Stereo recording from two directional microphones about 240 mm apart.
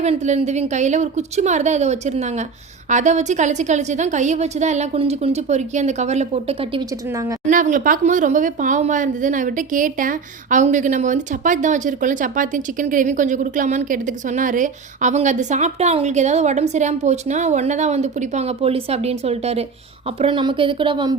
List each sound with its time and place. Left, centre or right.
0.0 s a woman's voice: right
7.1 s a woman's voice: centre
7.4 s a woman's voice: right